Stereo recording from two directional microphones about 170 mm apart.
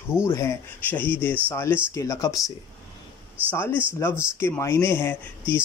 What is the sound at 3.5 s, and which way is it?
A man's voice, 15° left (ahead or behind).